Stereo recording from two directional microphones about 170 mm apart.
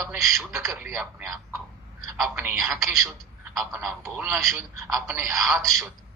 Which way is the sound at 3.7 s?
15° right (ahead or behind).